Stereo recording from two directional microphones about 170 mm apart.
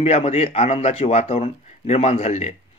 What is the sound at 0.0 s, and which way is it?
Speech, 35° left (ahead or behind).